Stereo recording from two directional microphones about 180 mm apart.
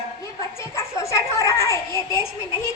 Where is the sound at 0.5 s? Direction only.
15° left (ahead or behind).